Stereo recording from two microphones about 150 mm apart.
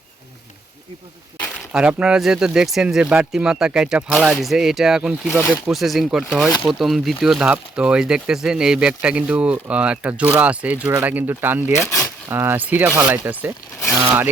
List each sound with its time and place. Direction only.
1.7 s speech: 5° right (ahead or behind)
11.7 s speech: 20° left (ahead or behind)
12.3 s speech: 15° right (ahead or behind)